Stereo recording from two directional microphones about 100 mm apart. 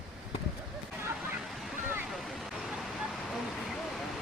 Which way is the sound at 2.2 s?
Centre (ahead or behind).